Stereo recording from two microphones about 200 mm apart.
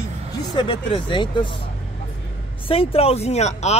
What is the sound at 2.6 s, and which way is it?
Speech, 30° left (ahead or behind).